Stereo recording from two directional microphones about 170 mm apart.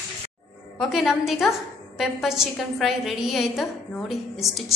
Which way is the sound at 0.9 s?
Centre (ahead or behind).